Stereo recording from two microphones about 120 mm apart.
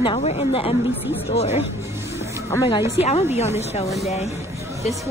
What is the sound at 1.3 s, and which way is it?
Speech, 60° left (ahead or behind).